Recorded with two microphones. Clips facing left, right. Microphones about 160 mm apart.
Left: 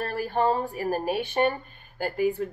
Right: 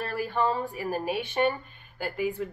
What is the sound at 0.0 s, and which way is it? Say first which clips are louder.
A woman's voice: left 2 dB; 40° left (ahead or behind).